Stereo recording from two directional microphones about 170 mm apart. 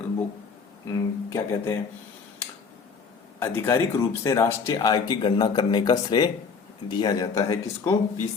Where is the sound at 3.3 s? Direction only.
15° left (ahead or behind).